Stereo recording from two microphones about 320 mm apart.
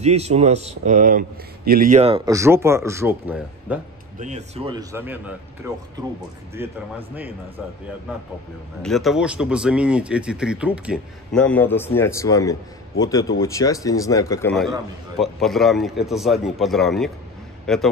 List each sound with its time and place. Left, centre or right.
0.0 s speech: centre
4.2 s a man's voice: right
8.8 s speech: centre